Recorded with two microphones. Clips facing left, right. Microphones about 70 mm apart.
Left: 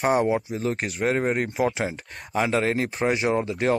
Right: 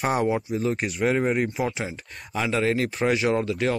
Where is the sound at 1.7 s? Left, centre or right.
Left.